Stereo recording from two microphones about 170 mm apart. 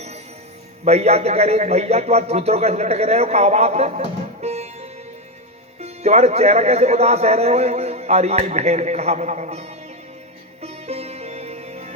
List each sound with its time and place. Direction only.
0.9 s a man's voice: 40° right (ahead or behind)
10.6 s music: 40° right (ahead or behind)